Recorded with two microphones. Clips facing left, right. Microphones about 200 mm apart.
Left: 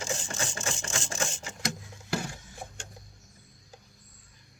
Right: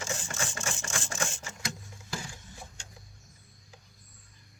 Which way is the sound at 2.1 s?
65° left (ahead or behind).